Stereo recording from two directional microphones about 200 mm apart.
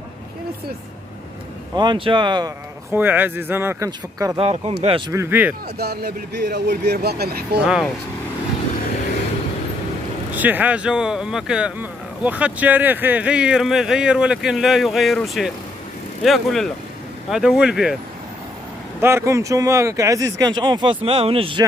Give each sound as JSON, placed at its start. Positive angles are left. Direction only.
{"t": 1.8, "sound": "speech", "side_deg": -25}
{"t": 2.9, "sound": "speech", "side_deg": -10}
{"t": 4.4, "sound": "speech", "side_deg": -30}
{"t": 5.1, "sound": "speech", "side_deg": -10}
{"t": 5.8, "sound": "speech", "side_deg": -55}
{"t": 7.6, "sound": "speech", "side_deg": -5}
{"t": 10.3, "sound": "speech", "side_deg": -10}
{"t": 18.9, "sound": "speech", "side_deg": -15}